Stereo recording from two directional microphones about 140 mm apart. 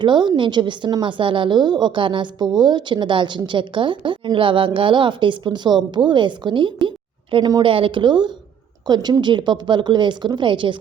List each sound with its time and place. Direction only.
0.0 s a woman's voice: 35° right (ahead or behind)